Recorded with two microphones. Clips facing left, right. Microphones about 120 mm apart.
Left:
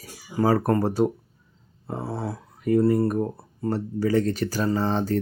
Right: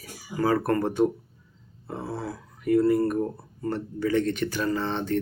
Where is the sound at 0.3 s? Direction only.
35° left (ahead or behind).